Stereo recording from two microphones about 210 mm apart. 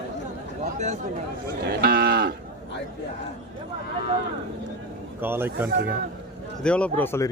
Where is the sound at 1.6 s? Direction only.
50° right (ahead or behind).